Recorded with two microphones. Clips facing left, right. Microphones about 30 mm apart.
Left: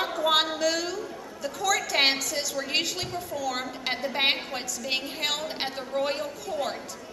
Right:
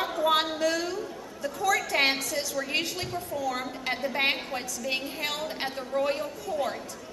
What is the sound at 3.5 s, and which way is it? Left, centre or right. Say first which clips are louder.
A woman's voice: left 1 dB; left.